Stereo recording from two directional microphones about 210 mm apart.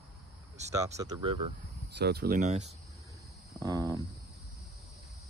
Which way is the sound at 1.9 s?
50° right (ahead or behind).